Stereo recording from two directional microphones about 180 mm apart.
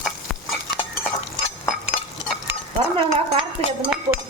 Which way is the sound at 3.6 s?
30° right (ahead or behind).